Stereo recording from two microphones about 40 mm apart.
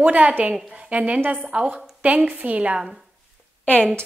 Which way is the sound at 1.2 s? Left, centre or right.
Right.